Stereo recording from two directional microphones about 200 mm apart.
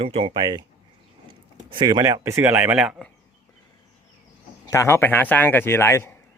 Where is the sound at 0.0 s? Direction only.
30° right (ahead or behind).